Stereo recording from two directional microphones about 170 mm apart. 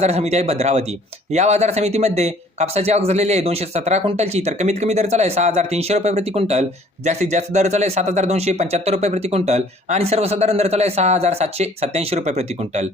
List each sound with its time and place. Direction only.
0.0 s speech: 40° right (ahead or behind)